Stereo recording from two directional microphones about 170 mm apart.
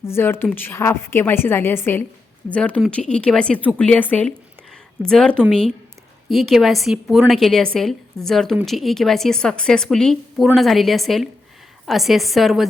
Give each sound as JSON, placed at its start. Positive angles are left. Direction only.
{"t": 0.0, "sound": "a woman's voice", "side_deg": 15}